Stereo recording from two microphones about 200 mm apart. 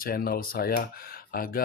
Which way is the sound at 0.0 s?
50° left (ahead or behind).